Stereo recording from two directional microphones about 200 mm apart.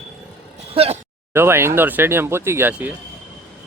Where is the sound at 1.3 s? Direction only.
10° right (ahead or behind).